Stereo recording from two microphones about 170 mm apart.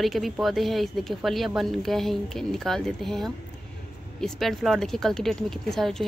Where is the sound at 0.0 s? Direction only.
Centre (ahead or behind).